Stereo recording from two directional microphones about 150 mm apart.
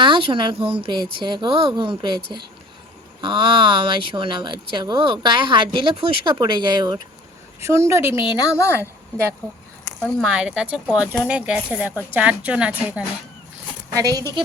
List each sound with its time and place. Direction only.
0.0 s speech: 35° right (ahead or behind)
7.6 s speech: 20° right (ahead or behind)
8.2 s a woman's voice: 30° left (ahead or behind)
8.5 s a woman's voice: 20° left (ahead or behind)
10.0 s speech: 5° right (ahead or behind)
13.9 s speech: 20° right (ahead or behind)